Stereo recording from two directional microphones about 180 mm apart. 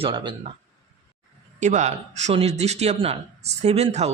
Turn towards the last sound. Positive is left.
turn(degrees=-35)  # may be behind; listen again after turning